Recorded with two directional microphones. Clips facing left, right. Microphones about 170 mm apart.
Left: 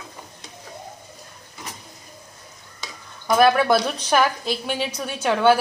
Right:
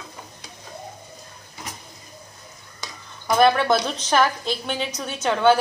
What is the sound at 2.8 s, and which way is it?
Speech, 5° left (ahead or behind).